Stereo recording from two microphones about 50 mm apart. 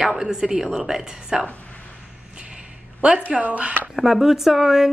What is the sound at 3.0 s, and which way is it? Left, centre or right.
Speech, right.